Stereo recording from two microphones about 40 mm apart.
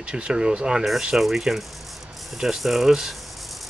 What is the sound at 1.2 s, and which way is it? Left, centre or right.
Speech, centre.